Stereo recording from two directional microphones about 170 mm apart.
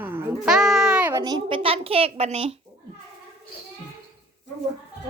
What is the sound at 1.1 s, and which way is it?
A child's voice, 25° right (ahead or behind).